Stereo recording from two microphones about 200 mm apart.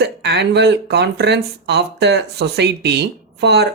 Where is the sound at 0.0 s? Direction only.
55° right (ahead or behind).